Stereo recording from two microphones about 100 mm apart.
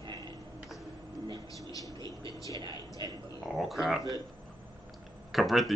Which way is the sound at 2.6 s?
50° right (ahead or behind).